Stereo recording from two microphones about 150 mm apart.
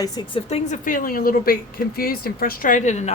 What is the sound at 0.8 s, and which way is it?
Speech, 65° left (ahead or behind).